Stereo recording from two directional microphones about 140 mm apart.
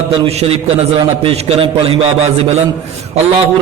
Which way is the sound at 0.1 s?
45° right (ahead or behind).